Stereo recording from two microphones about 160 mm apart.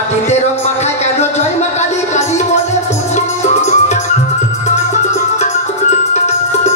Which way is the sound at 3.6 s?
45° left (ahead or behind).